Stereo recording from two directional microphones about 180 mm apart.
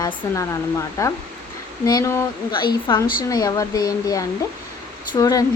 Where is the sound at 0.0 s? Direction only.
20° left (ahead or behind).